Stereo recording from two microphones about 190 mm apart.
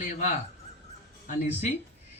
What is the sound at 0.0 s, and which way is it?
A man's voice, 40° left (ahead or behind).